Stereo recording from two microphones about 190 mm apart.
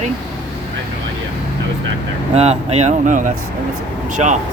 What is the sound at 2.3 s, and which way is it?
Speech, 35° right (ahead or behind).